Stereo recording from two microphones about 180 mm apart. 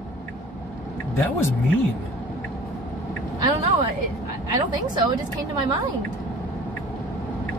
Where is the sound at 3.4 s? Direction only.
25° right (ahead or behind).